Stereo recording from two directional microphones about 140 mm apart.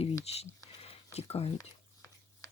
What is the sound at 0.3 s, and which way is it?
Whispering, 50° left (ahead or behind).